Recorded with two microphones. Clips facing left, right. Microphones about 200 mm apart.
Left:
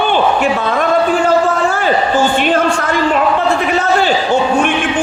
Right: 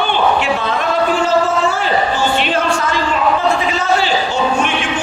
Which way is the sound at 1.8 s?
50° left (ahead or behind).